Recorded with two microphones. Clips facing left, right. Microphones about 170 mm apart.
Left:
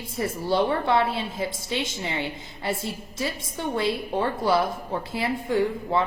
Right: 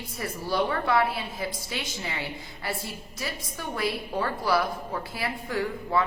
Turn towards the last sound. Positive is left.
turn(degrees=25)  # may be behind; listen again after turning